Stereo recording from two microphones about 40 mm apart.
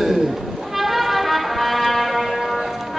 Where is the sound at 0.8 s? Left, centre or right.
Centre.